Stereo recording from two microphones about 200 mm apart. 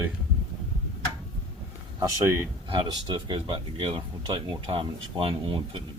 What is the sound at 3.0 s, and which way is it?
Speech, 25° right (ahead or behind).